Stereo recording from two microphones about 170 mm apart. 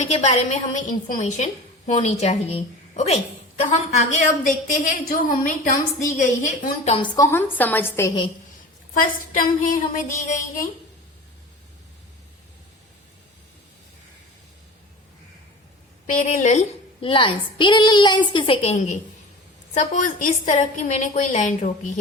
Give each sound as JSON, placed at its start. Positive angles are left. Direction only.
{"t": 0.0, "sound": "a woman's voice", "side_deg": 40}
{"t": 4.1, "sound": "a woman's voice", "side_deg": 50}
{"t": 7.2, "sound": "a woman's voice", "side_deg": 15}
{"t": 9.0, "sound": "a woman's voice", "side_deg": 55}
{"t": 16.0, "sound": "a woman's voice", "side_deg": 50}